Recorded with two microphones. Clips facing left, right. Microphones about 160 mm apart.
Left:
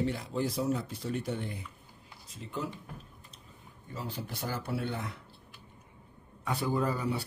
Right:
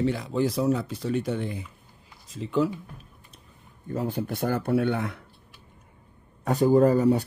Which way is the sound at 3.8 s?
55° right (ahead or behind).